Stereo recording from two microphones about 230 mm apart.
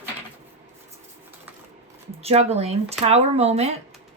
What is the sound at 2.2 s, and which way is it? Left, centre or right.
A woman's voice, right.